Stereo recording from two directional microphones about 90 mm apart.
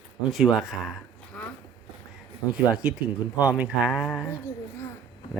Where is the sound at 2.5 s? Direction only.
10° right (ahead or behind).